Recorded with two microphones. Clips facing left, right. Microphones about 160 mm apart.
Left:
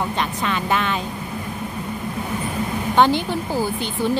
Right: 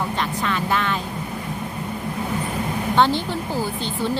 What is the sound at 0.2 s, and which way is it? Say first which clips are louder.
Speech: left 1 dB; 20° left (ahead or behind).